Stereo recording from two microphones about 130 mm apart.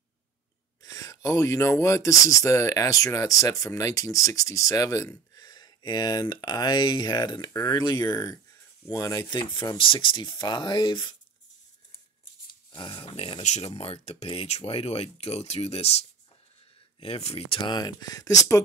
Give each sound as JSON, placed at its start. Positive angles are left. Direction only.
{"t": 0.8, "sound": "speech", "side_deg": 25}
{"t": 12.7, "sound": "speech", "side_deg": 40}
{"t": 17.6, "sound": "speech", "side_deg": 35}